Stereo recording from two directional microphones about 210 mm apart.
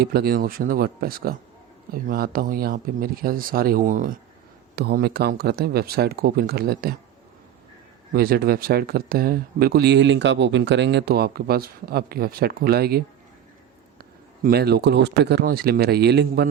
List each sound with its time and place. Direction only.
0.0 s speech: 45° right (ahead or behind)
8.1 s speech: 45° right (ahead or behind)
14.0 s speech: 45° right (ahead or behind)